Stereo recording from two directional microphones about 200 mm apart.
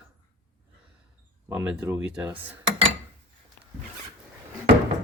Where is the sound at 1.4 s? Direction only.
10° right (ahead or behind).